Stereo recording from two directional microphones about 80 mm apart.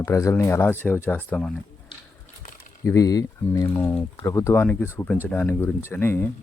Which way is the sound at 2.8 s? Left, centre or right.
Left.